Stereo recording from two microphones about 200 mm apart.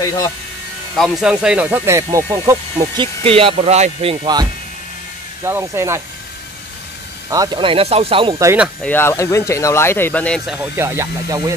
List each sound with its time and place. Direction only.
0.9 s speech: centre (ahead or behind); by 3.1 s 15° right (ahead or behind)
3.3 s speech: 30° right (ahead or behind)
7.2 s speech: 20° right (ahead or behind)
8.8 s speech: 10° left (ahead or behind); by 11.5 s 15° right (ahead or behind)